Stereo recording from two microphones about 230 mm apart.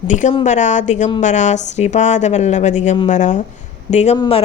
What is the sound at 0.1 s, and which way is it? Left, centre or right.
A woman's voice, left.